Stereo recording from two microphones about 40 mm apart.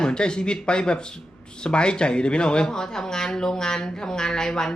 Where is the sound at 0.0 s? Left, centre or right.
Left.